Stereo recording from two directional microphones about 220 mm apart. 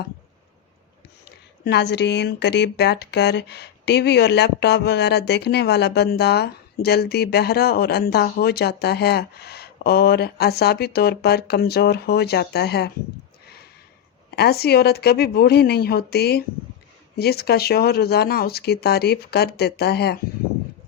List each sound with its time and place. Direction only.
1.6 s speech: 50° left (ahead or behind)
14.3 s speech: 45° left (ahead or behind)